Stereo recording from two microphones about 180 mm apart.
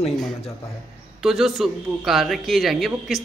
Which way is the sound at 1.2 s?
Centre (ahead or behind).